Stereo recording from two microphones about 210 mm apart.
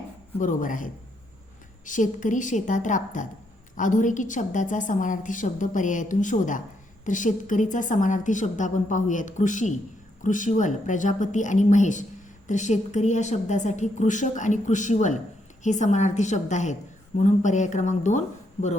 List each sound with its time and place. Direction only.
0.3 s a woman's voice: 40° left (ahead or behind)